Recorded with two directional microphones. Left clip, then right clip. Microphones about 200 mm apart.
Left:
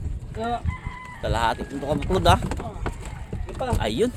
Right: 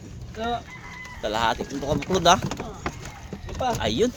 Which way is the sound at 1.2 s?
Centre (ahead or behind).